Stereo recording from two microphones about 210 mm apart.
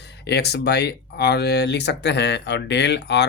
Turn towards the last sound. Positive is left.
turn(degrees=55)  # may be behind; listen again after turning